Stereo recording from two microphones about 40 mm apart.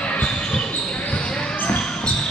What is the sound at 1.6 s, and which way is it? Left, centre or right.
Basketball bounce, left.